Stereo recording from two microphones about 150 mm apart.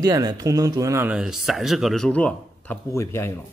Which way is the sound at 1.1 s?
5° right (ahead or behind).